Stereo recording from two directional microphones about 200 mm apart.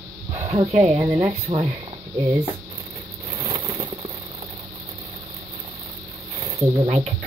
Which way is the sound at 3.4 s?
25° right (ahead or behind).